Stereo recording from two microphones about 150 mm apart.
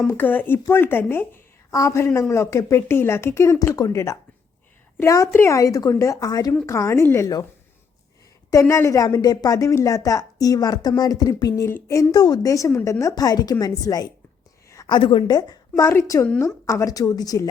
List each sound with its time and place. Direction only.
0.1 s a woman's voice: 10° left (ahead or behind)
8.4 s a woman's voice: 20° left (ahead or behind)